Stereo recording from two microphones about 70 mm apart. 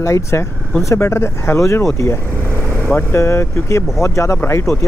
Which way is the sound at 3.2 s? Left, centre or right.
Left.